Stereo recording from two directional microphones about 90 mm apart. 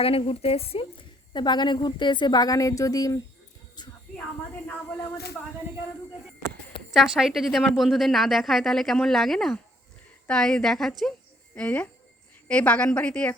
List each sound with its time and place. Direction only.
0.0 s a woman's voice: 90° left; by 3.2 s 40° left (ahead or behind)
3.8 s speech: 50° left (ahead or behind)
6.9 s a woman's voice: 5° right (ahead or behind)
11.5 s a woman's voice: 15° left (ahead or behind)